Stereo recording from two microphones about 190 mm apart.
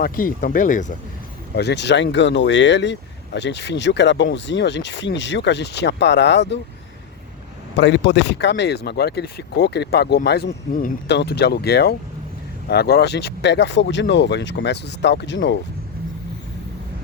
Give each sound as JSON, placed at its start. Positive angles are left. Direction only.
{"t": 0.0, "sound": "speech", "side_deg": 50}
{"t": 1.5, "sound": "speech", "side_deg": 65}
{"t": 7.8, "sound": "speech", "side_deg": 70}
{"t": 11.1, "sound": "speech", "side_deg": 60}